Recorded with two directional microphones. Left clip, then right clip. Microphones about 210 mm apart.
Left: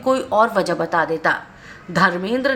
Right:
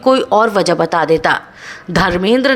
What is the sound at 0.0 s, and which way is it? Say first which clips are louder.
A woman's voice: right 6 dB; 25° right (ahead or behind).